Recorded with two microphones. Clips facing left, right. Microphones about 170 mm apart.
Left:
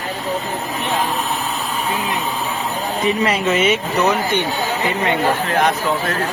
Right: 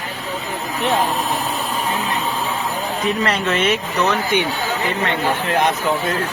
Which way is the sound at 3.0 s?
5° left (ahead or behind).